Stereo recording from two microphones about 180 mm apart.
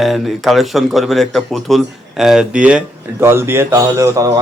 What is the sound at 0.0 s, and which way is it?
Speech, centre (ahead or behind).